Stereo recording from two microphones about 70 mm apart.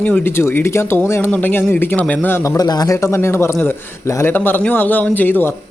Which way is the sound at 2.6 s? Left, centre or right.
Left.